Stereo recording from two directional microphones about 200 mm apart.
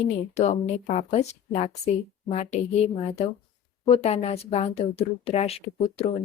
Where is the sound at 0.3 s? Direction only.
35° left (ahead or behind).